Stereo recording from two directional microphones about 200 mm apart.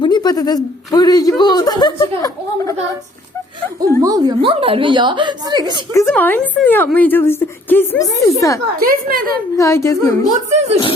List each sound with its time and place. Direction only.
0.0 s speech: 20° left (ahead or behind)
3.8 s a woman's voice: 20° right (ahead or behind)
5.7 s a woman's voice: 15° left (ahead or behind)
8.8 s a woman's voice: 45° right (ahead or behind)
9.6 s a woman's voice: 15° left (ahead or behind)
10.3 s speech: 35° right (ahead or behind)